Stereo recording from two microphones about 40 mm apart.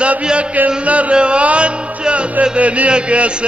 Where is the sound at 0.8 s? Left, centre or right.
Right.